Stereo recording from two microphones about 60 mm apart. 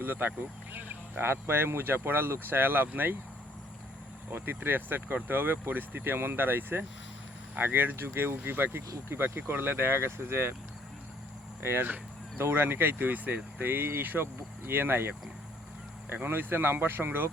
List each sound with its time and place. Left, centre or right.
0.0 s speech: right
4.3 s speech: right
11.6 s speech: right